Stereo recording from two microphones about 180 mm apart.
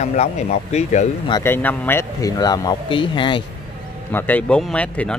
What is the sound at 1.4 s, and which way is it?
Speech, 10° left (ahead or behind).